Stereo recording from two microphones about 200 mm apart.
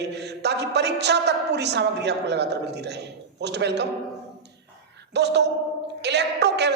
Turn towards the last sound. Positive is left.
turn(degrees=-60)  # may be behind; listen again after turning